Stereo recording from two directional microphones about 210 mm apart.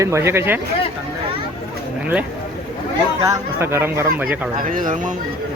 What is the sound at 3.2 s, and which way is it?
Speech, 15° right (ahead or behind).